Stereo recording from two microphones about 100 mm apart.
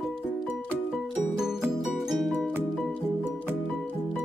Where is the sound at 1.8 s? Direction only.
Centre (ahead or behind).